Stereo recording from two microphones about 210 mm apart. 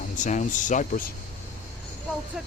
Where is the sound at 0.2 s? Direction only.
35° left (ahead or behind).